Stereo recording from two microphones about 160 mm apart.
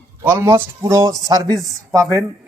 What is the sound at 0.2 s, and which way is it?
A man's voice, 15° right (ahead or behind).